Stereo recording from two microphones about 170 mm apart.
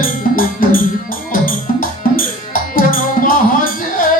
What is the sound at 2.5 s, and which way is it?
Music, 55° left (ahead or behind).